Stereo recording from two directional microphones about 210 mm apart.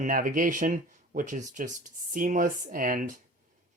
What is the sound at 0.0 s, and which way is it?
Speech, 40° right (ahead or behind).